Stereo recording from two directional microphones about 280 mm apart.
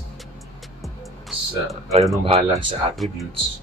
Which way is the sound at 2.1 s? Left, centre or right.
Centre.